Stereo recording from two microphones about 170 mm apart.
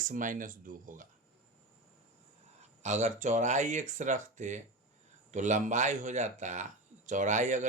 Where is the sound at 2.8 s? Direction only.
45° right (ahead or behind).